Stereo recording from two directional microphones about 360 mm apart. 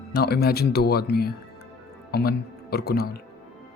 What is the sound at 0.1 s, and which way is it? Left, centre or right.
Speech, left.